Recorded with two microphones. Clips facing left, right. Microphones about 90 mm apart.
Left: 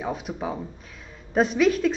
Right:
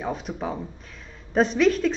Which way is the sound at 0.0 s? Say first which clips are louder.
Even; 5° left (ahead or behind).